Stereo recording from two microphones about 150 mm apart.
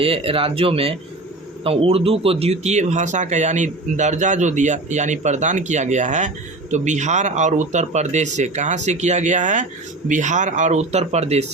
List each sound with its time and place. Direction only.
0.0 s speech: 40° right (ahead or behind)